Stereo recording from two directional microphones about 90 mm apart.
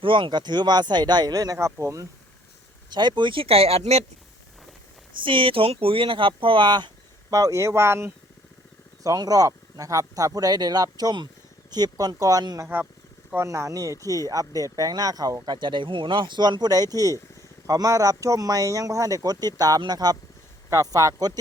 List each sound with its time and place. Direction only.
0.0 s speech: 70° right (ahead or behind); by 2.0 s 35° right (ahead or behind)
2.9 s speech: 55° right (ahead or behind); by 3.8 s 90° right
5.2 s speech: 70° right (ahead or behind); by 8.1 s 30° right (ahead or behind)
9.0 s speech: 45° right (ahead or behind)
12.6 s speech: 20° right (ahead or behind)
13.3 s speech: 30° right (ahead or behind)
15.5 s speech: 60° right (ahead or behind); by 21.3 s 45° right (ahead or behind)